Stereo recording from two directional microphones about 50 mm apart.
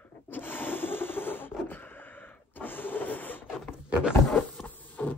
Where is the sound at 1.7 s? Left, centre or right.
Left.